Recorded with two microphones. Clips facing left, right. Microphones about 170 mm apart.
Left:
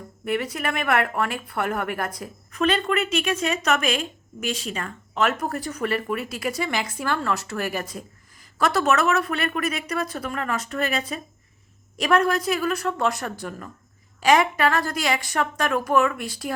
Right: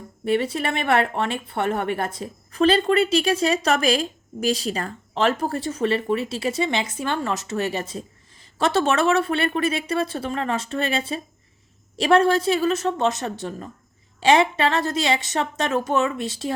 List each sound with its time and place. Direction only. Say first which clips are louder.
0.3 s speech: right 4 dB; 30° right (ahead or behind)